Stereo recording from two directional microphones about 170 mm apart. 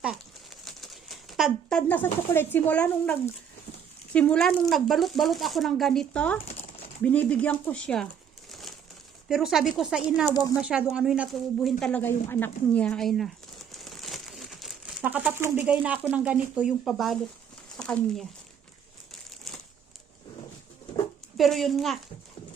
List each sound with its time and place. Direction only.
0.0 s crumpling: 5° right (ahead or behind)
1.9 s speech: 10° left (ahead or behind)
9.3 s speech: 5° right (ahead or behind)
10.2 s speech: 20° left (ahead or behind)
10.6 s speech: 5° right (ahead or behind)
19.5 s crumpling: centre (ahead or behind)
21.3 s speech: centre (ahead or behind)